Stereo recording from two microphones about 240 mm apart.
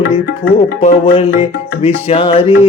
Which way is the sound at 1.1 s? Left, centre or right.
Left.